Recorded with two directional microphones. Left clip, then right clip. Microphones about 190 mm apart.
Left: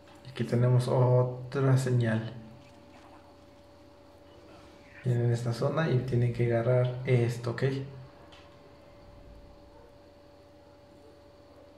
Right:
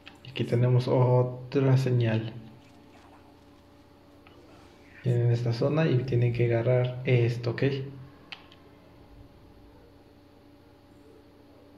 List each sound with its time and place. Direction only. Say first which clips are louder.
0.3 s speech: right 2 dB; 30° right (ahead or behind)
5.0 s speech: right 2 dB; 30° right (ahead or behind)